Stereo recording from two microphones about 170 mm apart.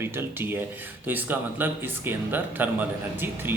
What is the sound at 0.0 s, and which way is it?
Speech, 15° right (ahead or behind).